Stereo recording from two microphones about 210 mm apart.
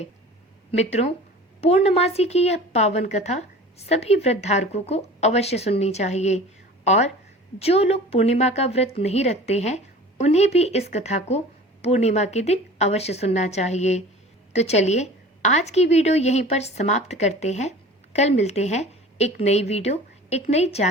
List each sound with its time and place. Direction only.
0.7 s a woman's voice: 30° left (ahead or behind)